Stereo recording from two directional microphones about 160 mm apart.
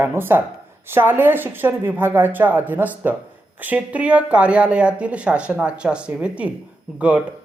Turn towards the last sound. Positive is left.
turn(degrees=-10)  # may be behind; listen again after turning